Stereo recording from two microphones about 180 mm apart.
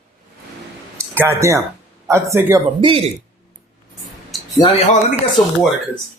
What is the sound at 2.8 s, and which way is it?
Speech, 30° right (ahead or behind).